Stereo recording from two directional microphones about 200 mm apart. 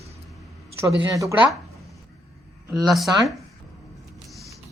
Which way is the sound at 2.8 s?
Centre (ahead or behind).